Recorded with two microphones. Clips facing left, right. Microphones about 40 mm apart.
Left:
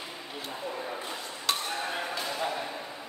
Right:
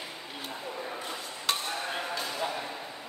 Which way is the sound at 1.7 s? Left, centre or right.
Centre.